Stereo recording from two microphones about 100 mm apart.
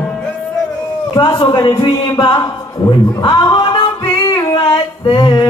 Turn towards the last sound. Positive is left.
turn(degrees=45)  # may be behind; listen again after turning